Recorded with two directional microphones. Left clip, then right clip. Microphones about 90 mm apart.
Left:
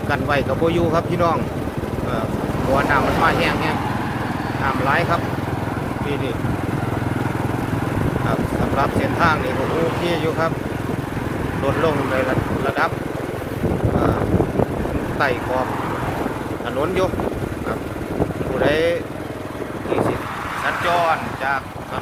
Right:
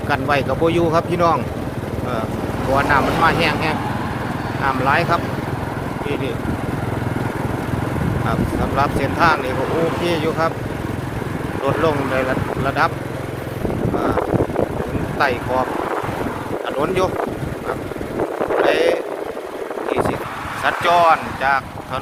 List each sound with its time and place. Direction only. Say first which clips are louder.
0.1 s speech: right 2 dB; 25° right (ahead or behind)
0.6 s speech: right 2 dB; 35° right (ahead or behind)
2.7 s speech: right 2 dB; 30° right (ahead or behind)
8.8 s speech: right 2 dB; 25° right (ahead or behind)
11.8 s speech: right 1 dB; 25° right (ahead or behind)
15.2 s speech: right 2 dB; 25° right (ahead or behind)
16.8 s speech: right 1 dB; 35° right (ahead or behind)
18.6 s speech: right 1 dB; 30° right (ahead or behind)
20.7 s speech: right 5 dB; 55° right (ahead or behind)